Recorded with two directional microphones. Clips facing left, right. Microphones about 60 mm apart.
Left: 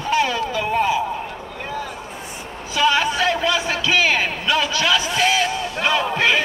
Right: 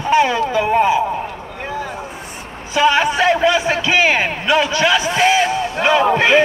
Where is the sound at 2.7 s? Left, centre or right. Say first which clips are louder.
Right 4 dB; right.